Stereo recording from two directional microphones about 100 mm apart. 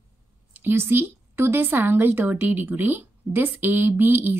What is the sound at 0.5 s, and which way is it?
Speech, 20° right (ahead or behind).